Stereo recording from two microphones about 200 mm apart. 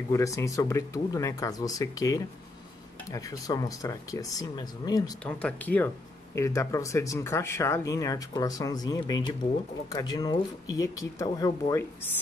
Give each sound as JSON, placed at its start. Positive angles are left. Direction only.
{"t": 0.1, "sound": "speech", "side_deg": 15}
{"t": 5.2, "sound": "speech", "side_deg": 5}